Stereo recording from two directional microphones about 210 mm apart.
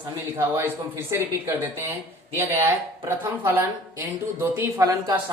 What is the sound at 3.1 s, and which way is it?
Speech, 10° right (ahead or behind).